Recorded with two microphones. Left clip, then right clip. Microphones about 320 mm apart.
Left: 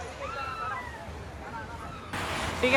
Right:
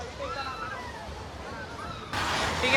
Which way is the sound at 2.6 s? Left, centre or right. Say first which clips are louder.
Left 1 dB; centre.